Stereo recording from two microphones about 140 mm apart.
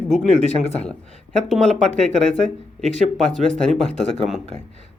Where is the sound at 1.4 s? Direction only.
Centre (ahead or behind).